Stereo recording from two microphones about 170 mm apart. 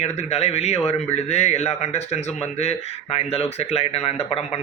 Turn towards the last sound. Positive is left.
turn(degrees=35)  # may be behind; listen again after turning